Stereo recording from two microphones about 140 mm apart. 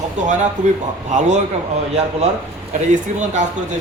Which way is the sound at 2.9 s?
60° right (ahead or behind).